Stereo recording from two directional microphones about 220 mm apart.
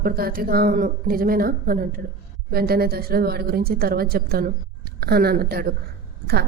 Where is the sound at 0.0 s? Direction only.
40° right (ahead or behind).